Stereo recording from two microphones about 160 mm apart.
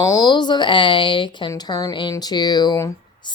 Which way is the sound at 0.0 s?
25° left (ahead or behind).